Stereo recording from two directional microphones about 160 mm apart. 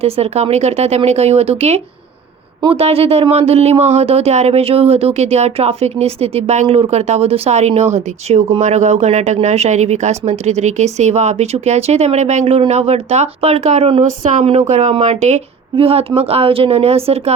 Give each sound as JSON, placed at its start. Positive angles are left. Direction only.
{"t": 0.0, "sound": "speech", "side_deg": -40}